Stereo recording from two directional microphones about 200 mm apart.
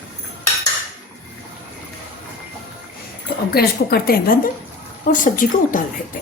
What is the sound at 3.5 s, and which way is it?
A woman's voice, 50° left (ahead or behind).